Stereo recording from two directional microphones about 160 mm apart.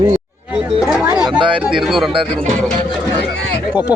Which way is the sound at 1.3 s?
30° right (ahead or behind).